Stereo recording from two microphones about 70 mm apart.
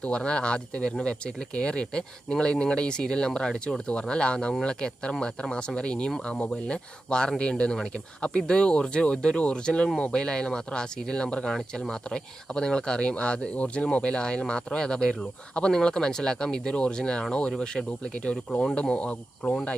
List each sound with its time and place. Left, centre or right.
0.0 s speech: centre